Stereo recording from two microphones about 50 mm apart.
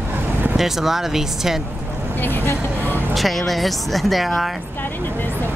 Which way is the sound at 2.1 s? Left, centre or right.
Left.